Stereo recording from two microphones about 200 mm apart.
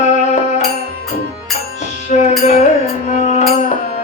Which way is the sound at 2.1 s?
35° left (ahead or behind).